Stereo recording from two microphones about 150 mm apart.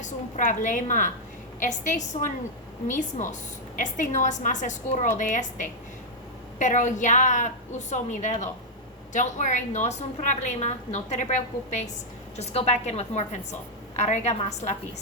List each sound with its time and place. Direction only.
0.0 s a woman's voice: 55° left (ahead or behind)